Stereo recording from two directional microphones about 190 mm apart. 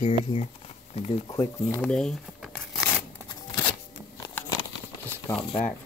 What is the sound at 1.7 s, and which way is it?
Speech, 5° left (ahead or behind).